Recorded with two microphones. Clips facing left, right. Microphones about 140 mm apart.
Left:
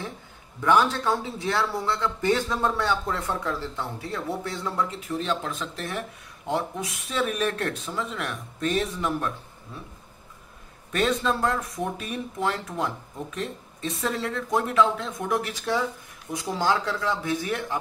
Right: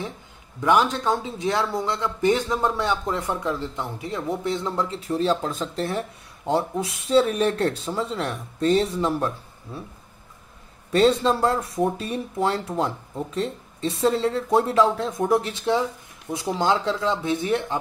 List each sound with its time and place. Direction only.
0.6 s speech: 20° right (ahead or behind)
10.9 s speech: 30° right (ahead or behind)